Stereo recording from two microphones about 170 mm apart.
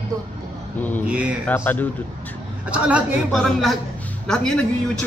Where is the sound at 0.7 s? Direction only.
10° left (ahead or behind).